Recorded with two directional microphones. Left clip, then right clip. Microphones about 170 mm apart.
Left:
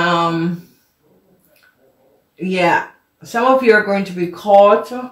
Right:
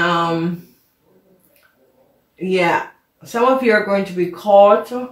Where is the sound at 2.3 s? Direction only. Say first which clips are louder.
Left 1 dB; 35° left (ahead or behind).